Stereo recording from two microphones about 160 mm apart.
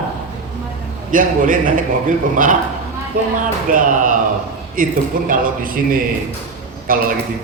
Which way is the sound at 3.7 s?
55° right (ahead or behind).